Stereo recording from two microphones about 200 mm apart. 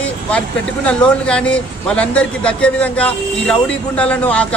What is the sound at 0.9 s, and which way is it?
A man's voice, 5° left (ahead or behind).